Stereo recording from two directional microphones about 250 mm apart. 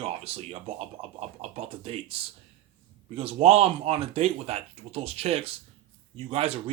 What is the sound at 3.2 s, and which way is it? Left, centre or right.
Speech, right.